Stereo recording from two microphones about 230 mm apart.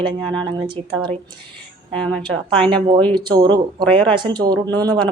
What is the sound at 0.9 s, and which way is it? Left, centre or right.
Speech, right.